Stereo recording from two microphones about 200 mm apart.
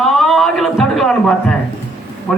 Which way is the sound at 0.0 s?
Centre (ahead or behind).